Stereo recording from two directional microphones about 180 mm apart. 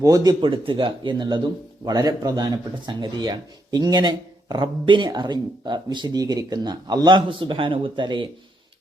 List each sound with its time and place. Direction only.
0.0 s speech: 20° right (ahead or behind)